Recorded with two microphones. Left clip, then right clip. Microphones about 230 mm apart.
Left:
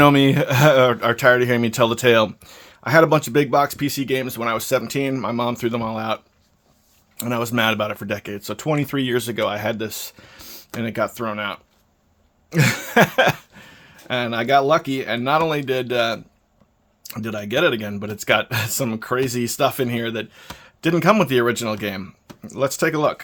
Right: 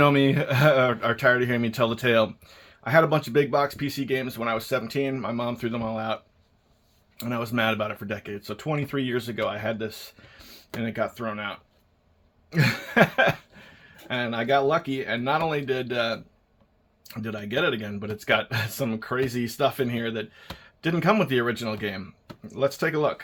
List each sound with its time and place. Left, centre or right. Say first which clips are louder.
0.0 s speech: left 6 dB; left